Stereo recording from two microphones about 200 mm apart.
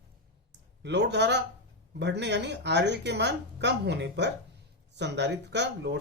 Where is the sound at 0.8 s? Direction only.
60° right (ahead or behind).